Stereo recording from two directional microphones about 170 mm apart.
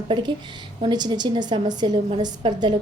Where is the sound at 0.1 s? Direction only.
30° right (ahead or behind).